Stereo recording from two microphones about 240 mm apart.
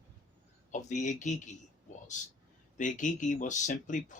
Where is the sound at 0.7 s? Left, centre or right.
Left.